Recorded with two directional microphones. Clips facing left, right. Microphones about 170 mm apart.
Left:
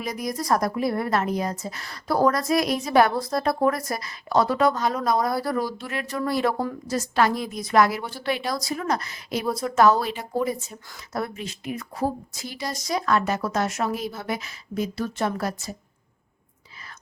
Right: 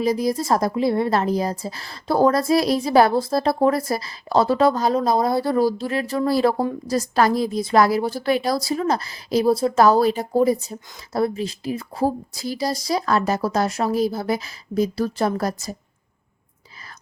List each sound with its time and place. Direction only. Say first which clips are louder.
0.0 s a woman's voice: right 8 dB; 30° right (ahead or behind)